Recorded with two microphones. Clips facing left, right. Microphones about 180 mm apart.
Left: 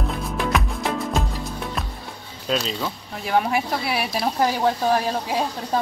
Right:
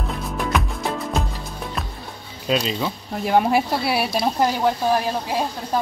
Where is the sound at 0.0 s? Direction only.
Centre (ahead or behind).